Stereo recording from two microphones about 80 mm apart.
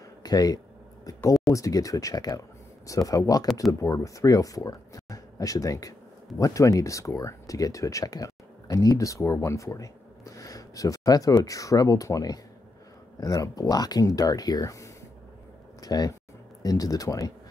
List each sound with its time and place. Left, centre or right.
0.2 s speech: left